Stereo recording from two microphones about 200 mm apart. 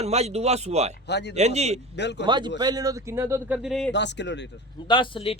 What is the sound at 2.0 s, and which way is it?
Speech, 60° left (ahead or behind).